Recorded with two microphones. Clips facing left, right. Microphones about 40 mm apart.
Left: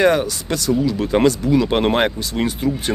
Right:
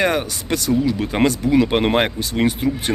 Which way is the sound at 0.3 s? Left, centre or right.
Right.